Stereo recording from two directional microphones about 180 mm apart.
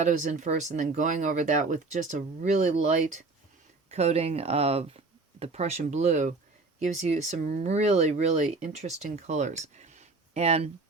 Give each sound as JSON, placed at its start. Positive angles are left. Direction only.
{"t": 0.0, "sound": "speech", "side_deg": -45}